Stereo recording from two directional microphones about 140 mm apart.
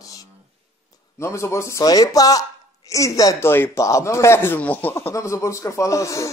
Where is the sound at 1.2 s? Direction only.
20° left (ahead or behind).